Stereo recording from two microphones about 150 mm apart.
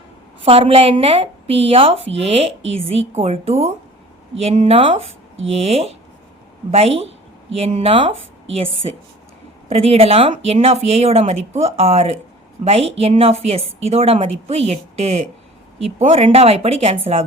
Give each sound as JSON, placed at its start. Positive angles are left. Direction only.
{"t": 0.4, "sound": "a woman's voice", "side_deg": -40}